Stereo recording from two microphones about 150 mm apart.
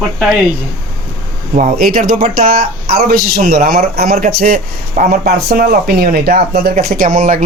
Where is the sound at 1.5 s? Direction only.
50° right (ahead or behind).